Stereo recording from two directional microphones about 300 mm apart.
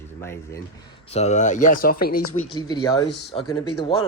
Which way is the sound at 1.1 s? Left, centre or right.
Left.